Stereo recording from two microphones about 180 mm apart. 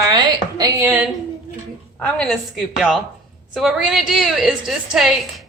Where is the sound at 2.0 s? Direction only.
5° left (ahead or behind).